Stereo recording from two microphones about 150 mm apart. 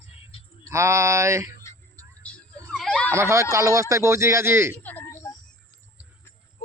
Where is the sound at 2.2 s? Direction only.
10° left (ahead or behind).